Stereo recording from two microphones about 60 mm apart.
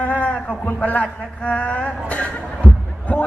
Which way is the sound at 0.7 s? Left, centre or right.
Left.